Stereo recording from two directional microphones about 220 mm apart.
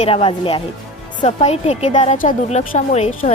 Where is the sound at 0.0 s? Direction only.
25° left (ahead or behind).